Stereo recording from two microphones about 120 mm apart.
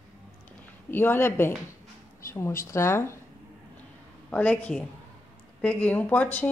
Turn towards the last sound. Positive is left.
turn(degrees=15)  # may be behind; listen again after turning